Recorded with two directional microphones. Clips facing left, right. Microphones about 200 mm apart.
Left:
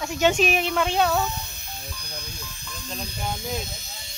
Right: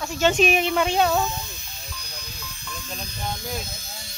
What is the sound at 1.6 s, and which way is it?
Music, 55° left (ahead or behind).